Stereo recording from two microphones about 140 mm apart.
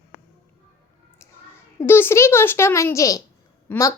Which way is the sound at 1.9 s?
15° left (ahead or behind).